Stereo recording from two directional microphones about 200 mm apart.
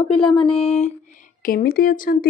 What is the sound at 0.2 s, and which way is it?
Speech, 25° left (ahead or behind).